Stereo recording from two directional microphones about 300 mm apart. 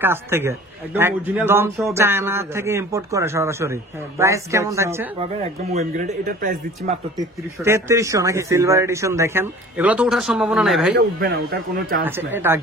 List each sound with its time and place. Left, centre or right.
0.0 s a man's voice: centre
5.4 s speech: right
7.2 s a man's voice: centre
11.0 s speech: right
12.0 s a man's voice: centre